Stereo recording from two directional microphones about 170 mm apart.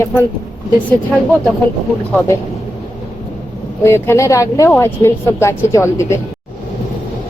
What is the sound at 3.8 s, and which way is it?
A woman's voice, 15° left (ahead or behind).